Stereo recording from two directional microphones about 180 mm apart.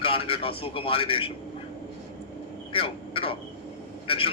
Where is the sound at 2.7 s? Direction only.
30° left (ahead or behind).